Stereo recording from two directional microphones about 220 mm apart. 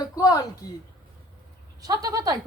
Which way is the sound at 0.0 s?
15° left (ahead or behind).